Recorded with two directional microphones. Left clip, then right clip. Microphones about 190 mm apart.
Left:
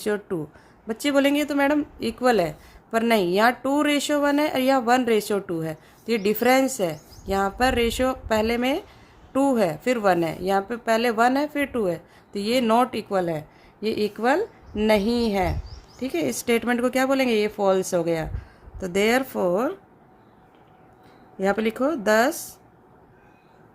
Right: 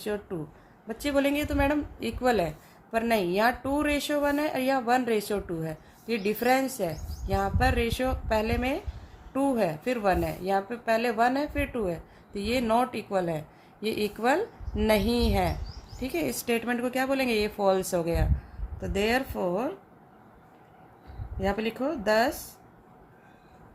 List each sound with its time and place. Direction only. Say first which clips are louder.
0.0 s a woman's voice: left 7 dB; 45° left (ahead or behind)
21.3 s speech: left 6 dB; 40° left (ahead or behind)